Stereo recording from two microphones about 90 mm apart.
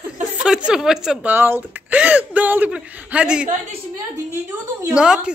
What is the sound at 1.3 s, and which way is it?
Speech, 20° right (ahead or behind).